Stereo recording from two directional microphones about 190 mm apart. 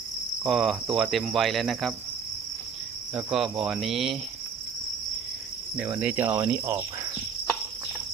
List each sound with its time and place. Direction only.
0.4 s cricket: centre (ahead or behind)
3.2 s cricket: 5° right (ahead or behind)
5.7 s cricket: 5° right (ahead or behind)